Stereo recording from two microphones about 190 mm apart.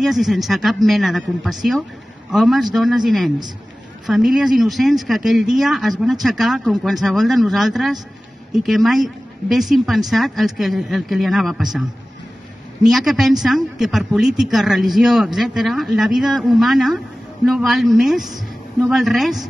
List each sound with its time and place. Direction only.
0.0 s speech: centre (ahead or behind)
12.8 s speech: centre (ahead or behind)